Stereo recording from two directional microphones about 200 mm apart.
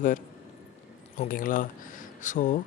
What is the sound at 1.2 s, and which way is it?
A woman's voice, 40° left (ahead or behind).